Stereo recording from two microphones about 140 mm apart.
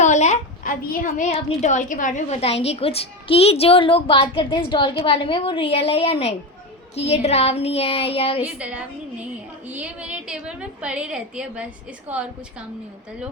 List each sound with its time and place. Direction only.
0.0 s a sound: 55° left (ahead or behind)
0.7 s a woman's voice: 90° left; by 8.4 s 45° left (ahead or behind)
8.4 s a woman's voice: 10° right (ahead or behind)